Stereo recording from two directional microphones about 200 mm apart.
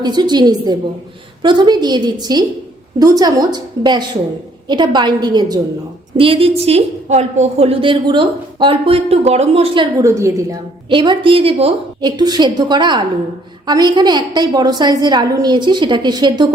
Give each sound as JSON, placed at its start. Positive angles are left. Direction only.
{"t": 0.0, "sound": "a woman's voice", "side_deg": -20}